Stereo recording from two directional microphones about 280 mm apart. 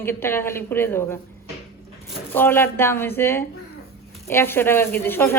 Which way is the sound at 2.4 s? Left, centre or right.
Centre.